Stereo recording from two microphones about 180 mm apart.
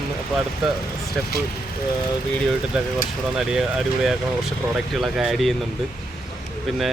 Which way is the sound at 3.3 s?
5° right (ahead or behind).